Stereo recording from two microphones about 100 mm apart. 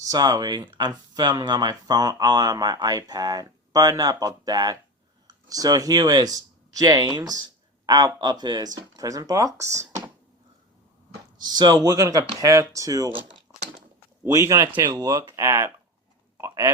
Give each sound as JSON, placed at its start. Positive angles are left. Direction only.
{"t": 0.0, "sound": "speech", "side_deg": -40}
{"t": 11.3, "sound": "speech", "side_deg": -45}
{"t": 13.5, "sound": "typing", "side_deg": -40}
{"t": 14.3, "sound": "speech", "side_deg": -30}